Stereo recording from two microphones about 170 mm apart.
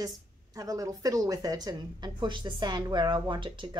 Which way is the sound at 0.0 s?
20° right (ahead or behind).